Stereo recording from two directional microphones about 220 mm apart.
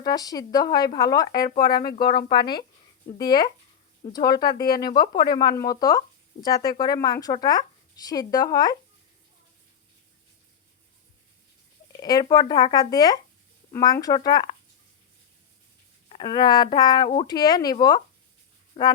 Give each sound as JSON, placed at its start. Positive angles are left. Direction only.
{"t": 0.0, "sound": "speech", "side_deg": 15}
{"t": 11.9, "sound": "speech", "side_deg": 20}
{"t": 16.0, "sound": "speech", "side_deg": 20}